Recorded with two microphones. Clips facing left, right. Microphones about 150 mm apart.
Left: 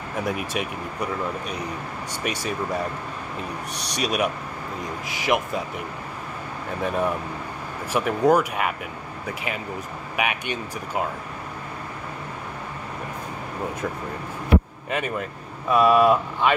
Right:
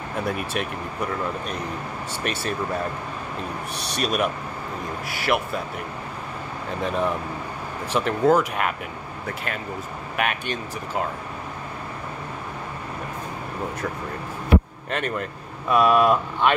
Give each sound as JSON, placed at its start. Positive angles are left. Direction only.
{"t": 0.5, "sound": "speech", "side_deg": 5}
{"t": 2.2, "sound": "speech", "side_deg": 15}
{"t": 3.9, "sound": "speech", "side_deg": 10}
{"t": 6.8, "sound": "speech", "side_deg": 10}
{"t": 14.9, "sound": "speech", "side_deg": 5}